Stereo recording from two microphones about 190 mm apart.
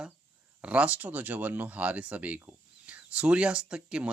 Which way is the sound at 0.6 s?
5° right (ahead or behind).